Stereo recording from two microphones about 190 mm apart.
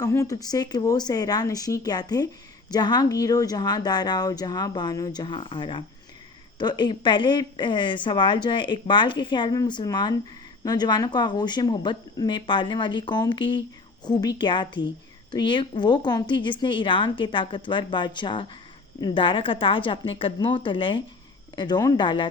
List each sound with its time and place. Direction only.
0.0 s a woman's voice: 15° left (ahead or behind)